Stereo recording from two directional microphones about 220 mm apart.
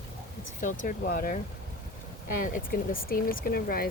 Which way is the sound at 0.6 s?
35° left (ahead or behind).